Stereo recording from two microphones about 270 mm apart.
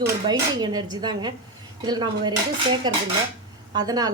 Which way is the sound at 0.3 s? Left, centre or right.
Centre.